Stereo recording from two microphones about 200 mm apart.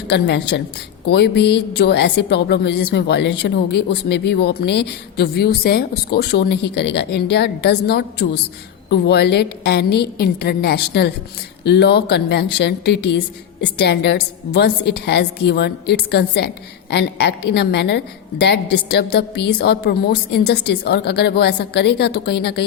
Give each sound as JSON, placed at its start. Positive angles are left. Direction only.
{"t": 0.1, "sound": "a woman's voice", "side_deg": 60}